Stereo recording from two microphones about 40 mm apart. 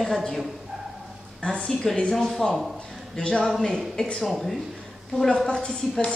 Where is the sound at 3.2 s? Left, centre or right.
Left.